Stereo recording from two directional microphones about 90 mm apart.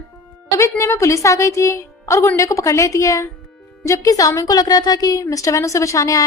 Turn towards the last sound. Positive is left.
turn(degrees=35)  # may be behind; listen again after turning